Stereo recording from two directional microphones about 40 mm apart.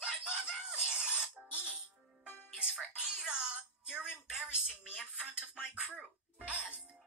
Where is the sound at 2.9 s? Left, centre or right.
Right.